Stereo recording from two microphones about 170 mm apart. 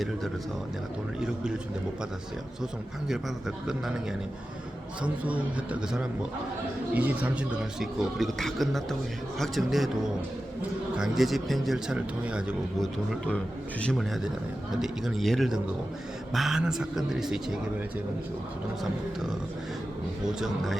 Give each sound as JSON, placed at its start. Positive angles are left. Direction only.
{"t": 5.0, "sound": "a man's voice", "side_deg": -10}
{"t": 20.2, "sound": "a man's voice", "side_deg": -5}